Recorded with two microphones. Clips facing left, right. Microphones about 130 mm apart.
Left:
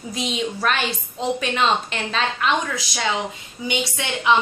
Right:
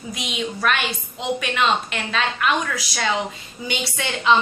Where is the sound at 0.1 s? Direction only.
30° left (ahead or behind).